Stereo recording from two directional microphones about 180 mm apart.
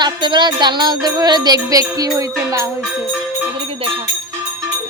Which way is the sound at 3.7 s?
30° right (ahead or behind).